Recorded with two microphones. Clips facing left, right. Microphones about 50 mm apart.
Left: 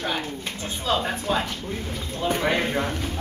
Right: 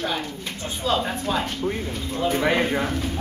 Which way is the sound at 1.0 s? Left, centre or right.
Centre.